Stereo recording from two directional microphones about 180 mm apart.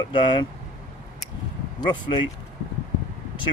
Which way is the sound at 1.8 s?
25° left (ahead or behind).